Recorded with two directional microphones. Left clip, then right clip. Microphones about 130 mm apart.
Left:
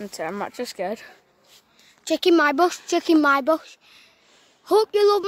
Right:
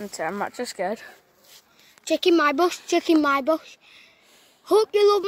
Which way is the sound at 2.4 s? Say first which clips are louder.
Left 2 dB; 30° left (ahead or behind).